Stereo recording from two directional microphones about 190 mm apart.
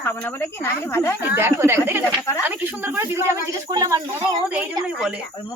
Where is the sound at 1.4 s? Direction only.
15° right (ahead or behind).